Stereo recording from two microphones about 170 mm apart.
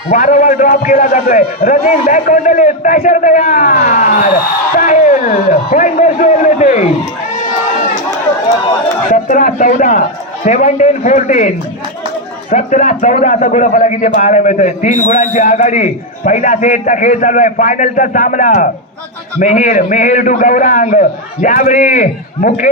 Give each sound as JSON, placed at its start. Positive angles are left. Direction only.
{"t": 0.1, "sound": "a man's voice", "side_deg": 50}
{"t": 9.1, "sound": "a man's voice", "side_deg": 55}